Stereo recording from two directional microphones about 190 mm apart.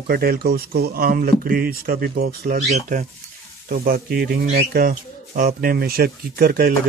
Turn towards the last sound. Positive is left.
turn(degrees=-50)  # may be behind; listen again after turning